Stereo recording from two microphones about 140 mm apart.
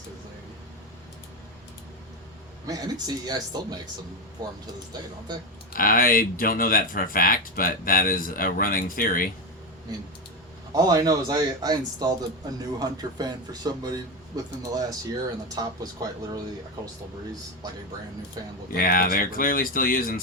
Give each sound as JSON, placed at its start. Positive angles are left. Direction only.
{"t": 2.6, "sound": "a man's voice", "side_deg": -30}
{"t": 5.7, "sound": "speech", "side_deg": 90}
{"t": 10.8, "sound": "a man's voice", "side_deg": -25}
{"t": 18.7, "sound": "speech", "side_deg": 90}